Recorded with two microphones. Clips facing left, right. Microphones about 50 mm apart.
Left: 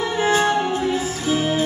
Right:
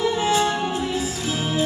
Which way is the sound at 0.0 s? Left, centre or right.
Left.